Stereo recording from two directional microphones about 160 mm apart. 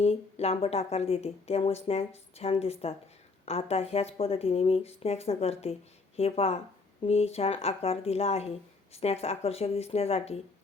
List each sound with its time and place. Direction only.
0.0 s speech: 40° left (ahead or behind)